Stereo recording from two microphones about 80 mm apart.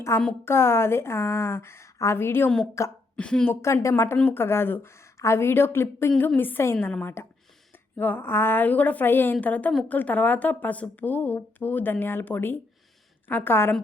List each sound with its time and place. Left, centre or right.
0.1 s a woman's voice: left
3.2 s a woman's voice: centre
3.5 s a woman's voice: left